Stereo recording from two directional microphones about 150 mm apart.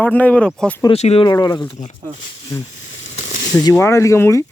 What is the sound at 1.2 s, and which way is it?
Speech, 25° left (ahead or behind).